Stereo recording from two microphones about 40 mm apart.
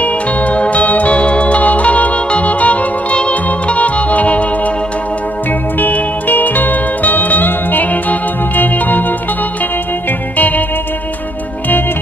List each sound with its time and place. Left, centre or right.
0.0 s music: left
5.8 s music: left
10.3 s music: left